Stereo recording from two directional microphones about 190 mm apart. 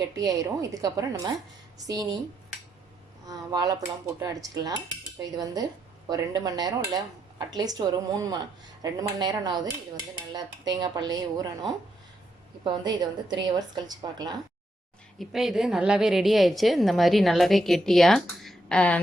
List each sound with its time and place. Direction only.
0.0 s speech: 20° right (ahead or behind)
3.2 s speech: 20° right (ahead or behind)
12.8 s speech: 20° right (ahead or behind)
15.2 s a woman's voice: centre (ahead or behind)